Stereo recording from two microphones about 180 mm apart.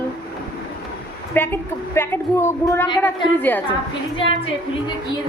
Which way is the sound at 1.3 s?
10° left (ahead or behind).